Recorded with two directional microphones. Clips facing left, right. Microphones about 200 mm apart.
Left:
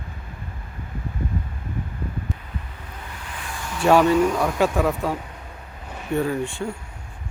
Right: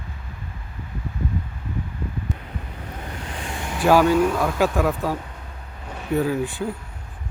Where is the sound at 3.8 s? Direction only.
Centre (ahead or behind).